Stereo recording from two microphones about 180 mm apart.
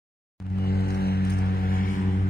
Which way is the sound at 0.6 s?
60° left (ahead or behind).